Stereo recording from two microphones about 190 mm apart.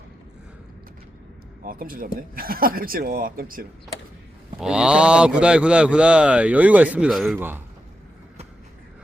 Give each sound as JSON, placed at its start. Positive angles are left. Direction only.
{"t": 1.6, "sound": "speech", "side_deg": -50}
{"t": 4.6, "sound": "a man's voice", "side_deg": -5}